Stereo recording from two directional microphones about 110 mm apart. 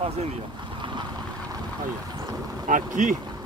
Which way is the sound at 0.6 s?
45° right (ahead or behind).